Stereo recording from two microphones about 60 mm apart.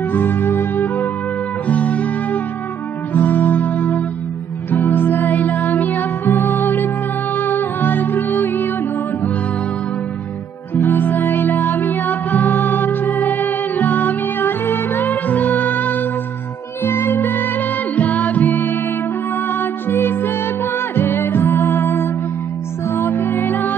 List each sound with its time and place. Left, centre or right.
0.1 s music: left
1.7 s music: left
10.7 s music: left
17.9 s music: left